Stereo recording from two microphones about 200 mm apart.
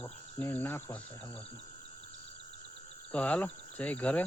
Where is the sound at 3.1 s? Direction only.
5° left (ahead or behind).